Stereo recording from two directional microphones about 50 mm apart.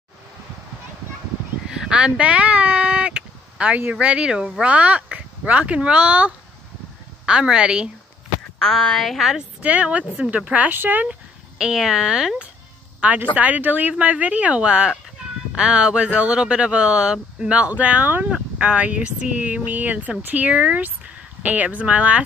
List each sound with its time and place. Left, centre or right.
1.7 s a sound: centre
4.0 s speech: right
8.5 s speech: centre
9.6 s speech: right
10.7 s speech: right
11.5 s speech: centre
13.0 s speech: right